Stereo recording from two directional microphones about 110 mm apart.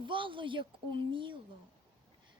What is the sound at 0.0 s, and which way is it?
A woman's voice, 50° right (ahead or behind).